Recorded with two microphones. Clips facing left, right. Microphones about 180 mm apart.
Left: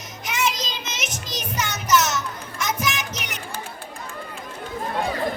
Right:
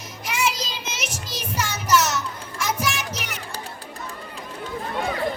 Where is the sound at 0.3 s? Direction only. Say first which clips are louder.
Even; 10° right (ahead or behind).